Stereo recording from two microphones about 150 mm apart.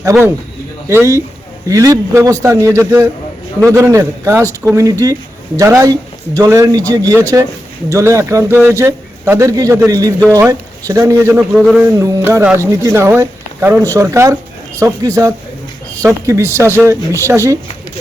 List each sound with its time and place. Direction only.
0.0 s speech: 20° right (ahead or behind)
11.5 s a man's voice: 5° right (ahead or behind)
11.8 s speech: 20° right (ahead or behind)